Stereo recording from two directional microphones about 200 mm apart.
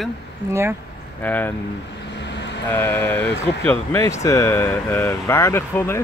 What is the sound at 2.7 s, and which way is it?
Speech, 10° left (ahead or behind).